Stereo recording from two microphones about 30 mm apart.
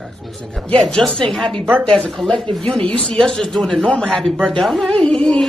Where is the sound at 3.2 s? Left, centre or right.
Centre.